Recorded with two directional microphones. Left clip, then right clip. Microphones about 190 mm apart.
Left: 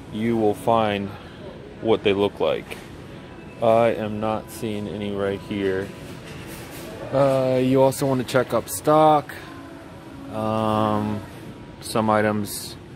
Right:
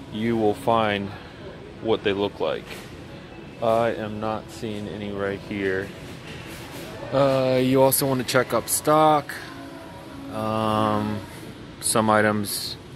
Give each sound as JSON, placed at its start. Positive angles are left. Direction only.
{"t": 0.1, "sound": "speech", "side_deg": 10}
{"t": 1.9, "sound": "speech", "side_deg": 20}
{"t": 3.6, "sound": "speech", "side_deg": 25}
{"t": 7.2, "sound": "speech", "side_deg": 0}
{"t": 10.3, "sound": "speech", "side_deg": 15}
{"t": 11.8, "sound": "speech", "side_deg": 0}